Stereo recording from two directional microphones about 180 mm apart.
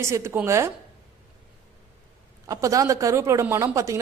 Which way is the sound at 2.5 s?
20° right (ahead or behind).